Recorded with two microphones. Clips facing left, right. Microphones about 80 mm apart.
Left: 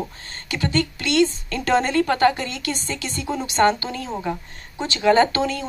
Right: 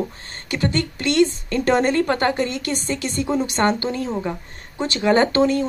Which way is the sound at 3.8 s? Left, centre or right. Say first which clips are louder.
Right 4 dB; right.